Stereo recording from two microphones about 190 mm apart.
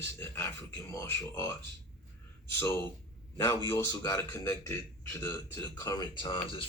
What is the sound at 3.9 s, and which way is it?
Speech, 20° left (ahead or behind).